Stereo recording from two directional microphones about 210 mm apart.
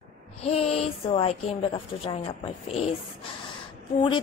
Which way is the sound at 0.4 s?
30° left (ahead or behind).